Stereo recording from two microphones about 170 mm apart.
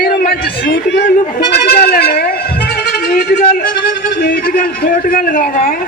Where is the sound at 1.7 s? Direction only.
65° left (ahead or behind).